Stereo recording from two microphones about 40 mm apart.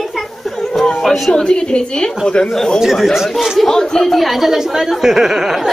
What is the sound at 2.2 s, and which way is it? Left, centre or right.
Speech, left.